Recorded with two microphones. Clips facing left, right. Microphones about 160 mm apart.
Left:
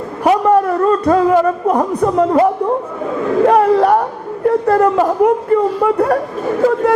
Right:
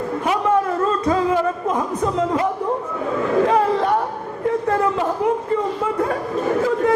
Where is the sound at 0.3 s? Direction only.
60° left (ahead or behind).